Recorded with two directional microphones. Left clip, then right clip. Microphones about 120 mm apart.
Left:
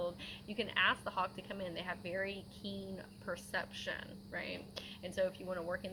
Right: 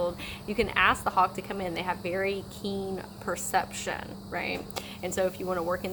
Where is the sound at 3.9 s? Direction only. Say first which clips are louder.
Right 9 dB; 40° right (ahead or behind).